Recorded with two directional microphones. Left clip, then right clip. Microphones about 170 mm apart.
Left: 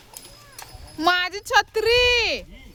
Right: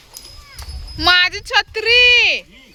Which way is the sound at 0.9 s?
15° left (ahead or behind).